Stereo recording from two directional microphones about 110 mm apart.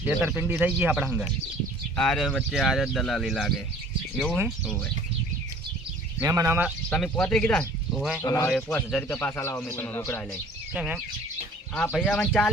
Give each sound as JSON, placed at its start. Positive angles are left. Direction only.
{"t": 0.0, "sound": "speech", "side_deg": -20}
{"t": 2.0, "sound": "speech", "side_deg": 5}
{"t": 6.2, "sound": "speech", "side_deg": -25}
{"t": 6.9, "sound": "a man's voice", "side_deg": 10}
{"t": 7.9, "sound": "speech", "side_deg": -5}
{"t": 8.2, "sound": "a man's voice", "side_deg": 30}
{"t": 8.4, "sound": "a man's voice", "side_deg": 5}
{"t": 10.8, "sound": "speech", "side_deg": -10}
{"t": 11.7, "sound": "speech", "side_deg": 5}